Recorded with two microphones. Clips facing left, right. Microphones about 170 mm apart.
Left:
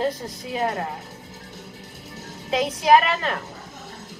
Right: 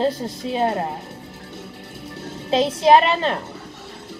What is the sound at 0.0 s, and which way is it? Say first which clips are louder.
Speech: right 4 dB; 30° right (ahead or behind).